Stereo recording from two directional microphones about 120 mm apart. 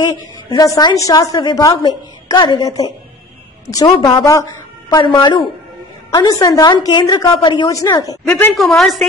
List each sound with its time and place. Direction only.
0.0 s a woman's voice: 30° left (ahead or behind)
7.7 s speech: 30° left (ahead or behind)
8.3 s a woman's voice: 15° left (ahead or behind)
8.6 s a woman's voice: centre (ahead or behind)